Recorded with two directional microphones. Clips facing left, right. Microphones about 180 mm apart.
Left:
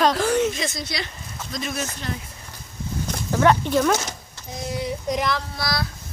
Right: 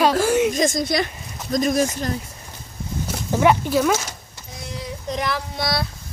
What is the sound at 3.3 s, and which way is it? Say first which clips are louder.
Speech: right 1 dB; 15° right (ahead or behind).